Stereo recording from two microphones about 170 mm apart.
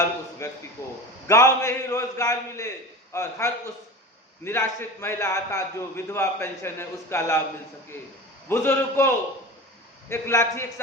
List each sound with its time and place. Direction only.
0.4 s a man's voice: 20° left (ahead or behind)
8.4 s a man's voice: 15° left (ahead or behind)